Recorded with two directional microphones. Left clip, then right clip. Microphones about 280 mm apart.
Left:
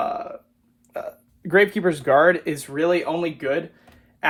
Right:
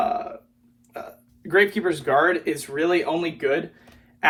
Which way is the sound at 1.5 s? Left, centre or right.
Left.